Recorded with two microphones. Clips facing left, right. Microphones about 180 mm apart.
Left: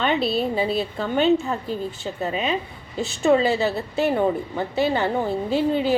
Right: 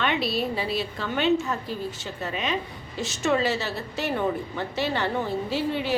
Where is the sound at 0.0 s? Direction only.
35° left (ahead or behind).